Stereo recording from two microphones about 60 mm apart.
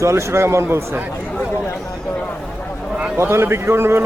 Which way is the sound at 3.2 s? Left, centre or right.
Right.